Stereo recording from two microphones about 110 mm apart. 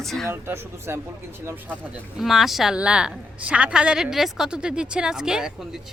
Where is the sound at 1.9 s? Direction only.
5° right (ahead or behind).